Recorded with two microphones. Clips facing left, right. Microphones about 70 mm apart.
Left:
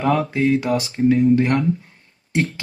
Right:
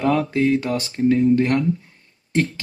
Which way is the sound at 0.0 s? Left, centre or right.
Centre.